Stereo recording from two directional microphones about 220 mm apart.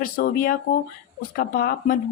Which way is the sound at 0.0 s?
40° left (ahead or behind).